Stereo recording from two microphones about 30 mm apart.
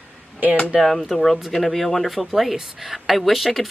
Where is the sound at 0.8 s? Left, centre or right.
Centre.